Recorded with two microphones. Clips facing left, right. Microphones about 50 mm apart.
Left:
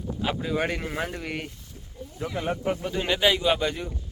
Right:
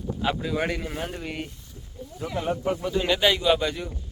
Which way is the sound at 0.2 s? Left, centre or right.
Centre.